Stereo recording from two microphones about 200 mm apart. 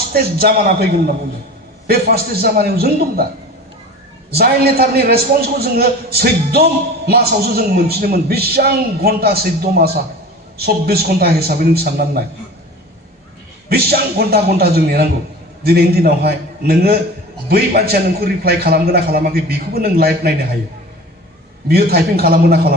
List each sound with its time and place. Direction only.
0.1 s a man's voice: 50° right (ahead or behind)
4.3 s a man's voice: 50° right (ahead or behind)
13.7 s a man's voice: 50° right (ahead or behind)
21.7 s a man's voice: 50° right (ahead or behind)